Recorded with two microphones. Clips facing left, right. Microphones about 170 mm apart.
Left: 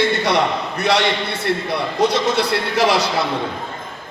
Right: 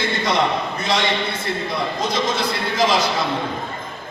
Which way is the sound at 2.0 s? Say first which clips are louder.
Left 7 dB; 65° left (ahead or behind).